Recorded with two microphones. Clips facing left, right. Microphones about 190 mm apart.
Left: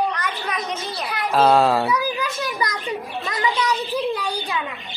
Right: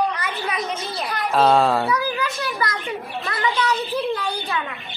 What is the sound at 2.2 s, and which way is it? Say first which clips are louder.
A child's voice: even; 15° left (ahead or behind).